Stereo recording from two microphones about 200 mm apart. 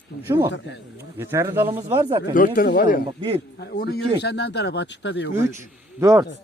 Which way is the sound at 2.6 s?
45° left (ahead or behind).